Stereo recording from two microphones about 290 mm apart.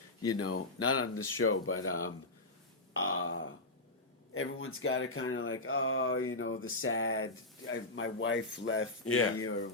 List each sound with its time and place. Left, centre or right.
0.3 s speech: left
2.9 s a sound: left
4.4 s speech: left